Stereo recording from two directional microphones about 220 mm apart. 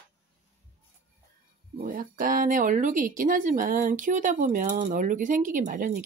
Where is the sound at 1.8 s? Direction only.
40° right (ahead or behind).